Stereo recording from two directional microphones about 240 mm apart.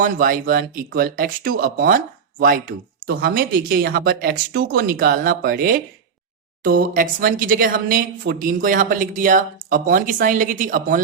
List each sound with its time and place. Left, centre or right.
0.0 s speech: right